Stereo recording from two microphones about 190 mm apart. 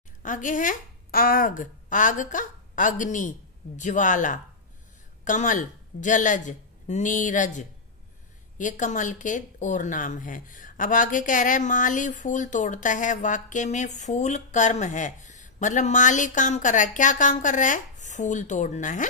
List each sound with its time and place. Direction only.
0.2 s a woman's voice: 40° left (ahead or behind)